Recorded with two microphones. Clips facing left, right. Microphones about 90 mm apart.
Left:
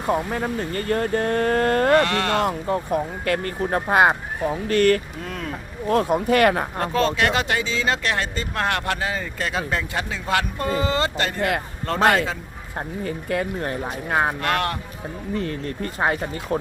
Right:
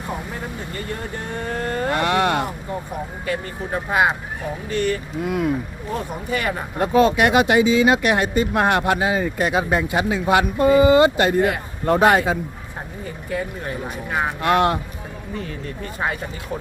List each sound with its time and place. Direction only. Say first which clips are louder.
0.3 s speech: left 5 dB; 60° left (ahead or behind)
2.0 s speech: right 1 dB; 20° right (ahead or behind)
3.2 s speech: left 3 dB; 60° left (ahead or behind)
3.8 s speech: left 2 dB; 45° left (ahead or behind)
4.7 s speech: left 4 dB; 65° left (ahead or behind)
5.2 s speech: right 9 dB; 10° right (ahead or behind)
5.9 s speech: left 7 dB; 70° left (ahead or behind)
6.7 s speech: right 5 dB; 15° right (ahead or behind)
11.3 s speech: right 4 dB; 65° left (ahead or behind)
11.9 s speech: right 4 dB; 15° right (ahead or behind)
13.1 s speech: left 1 dB; 60° left (ahead or behind)
14.4 s speech: right 6 dB; 20° right (ahead or behind)
15.4 s speech: left 3 dB; 45° left (ahead or behind)